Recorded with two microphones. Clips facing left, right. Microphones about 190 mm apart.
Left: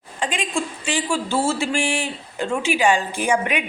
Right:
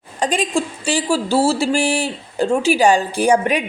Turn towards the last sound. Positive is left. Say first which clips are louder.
# right 6 dB
turn(degrees=-35)  # may be behind; listen again after turning